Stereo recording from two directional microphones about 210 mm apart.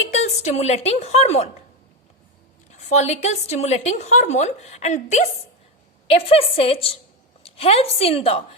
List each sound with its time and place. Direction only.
0.1 s a woman's voice: 30° left (ahead or behind)
2.7 s a woman's voice: 30° left (ahead or behind)